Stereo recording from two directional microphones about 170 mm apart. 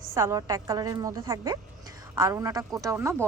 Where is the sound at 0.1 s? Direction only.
15° right (ahead or behind).